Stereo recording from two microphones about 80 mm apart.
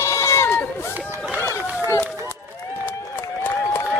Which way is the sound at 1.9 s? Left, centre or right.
Left.